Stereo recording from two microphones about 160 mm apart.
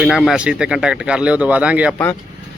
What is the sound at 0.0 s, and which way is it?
Speech, centre (ahead or behind).